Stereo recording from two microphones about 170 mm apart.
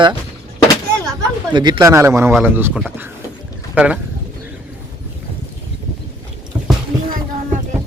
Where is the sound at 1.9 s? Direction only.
15° right (ahead or behind).